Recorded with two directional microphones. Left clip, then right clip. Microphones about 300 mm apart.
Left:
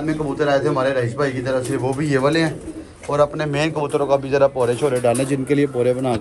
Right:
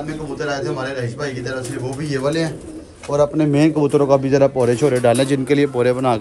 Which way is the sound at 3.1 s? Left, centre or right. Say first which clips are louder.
Right 2 dB; right.